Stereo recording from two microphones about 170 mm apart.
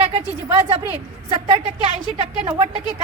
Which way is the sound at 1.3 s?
30° right (ahead or behind).